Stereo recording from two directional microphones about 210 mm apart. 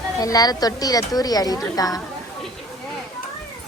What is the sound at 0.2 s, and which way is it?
Speech, 15° left (ahead or behind).